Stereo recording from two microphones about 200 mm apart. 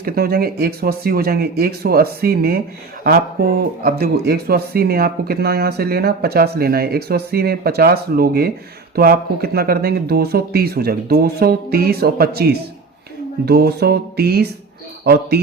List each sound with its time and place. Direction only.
0.0 s speech: 50° right (ahead or behind)